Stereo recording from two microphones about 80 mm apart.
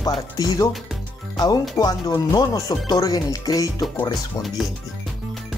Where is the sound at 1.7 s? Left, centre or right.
Left.